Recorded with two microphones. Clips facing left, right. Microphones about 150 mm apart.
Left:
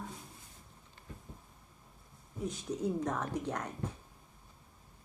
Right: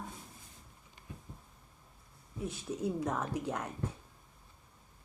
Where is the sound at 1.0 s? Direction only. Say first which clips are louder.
Right 1 dB; 15° right (ahead or behind).